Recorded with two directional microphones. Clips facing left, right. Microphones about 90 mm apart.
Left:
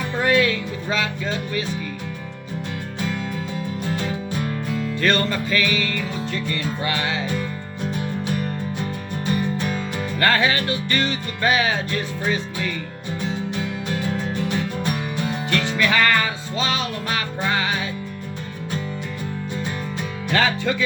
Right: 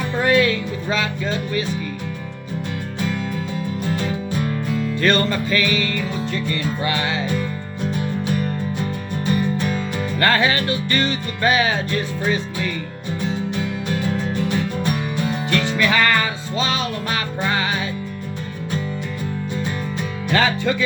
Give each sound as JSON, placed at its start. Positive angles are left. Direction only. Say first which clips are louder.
{"t": 0.2, "sound": "music", "louder": "right 2 dB", "side_deg": -30}
{"t": 4.9, "sound": "music", "louder": "right 2 dB", "side_deg": -40}
{"t": 6.3, "sound": "music", "louder": "right 2 dB", "side_deg": -25}
{"t": 10.2, "sound": "music", "louder": "right 1 dB", "side_deg": -35}
{"t": 15.4, "sound": "music", "louder": "right 1 dB", "side_deg": -20}
{"t": 20.3, "sound": "music", "louder": "right 2 dB", "side_deg": -30}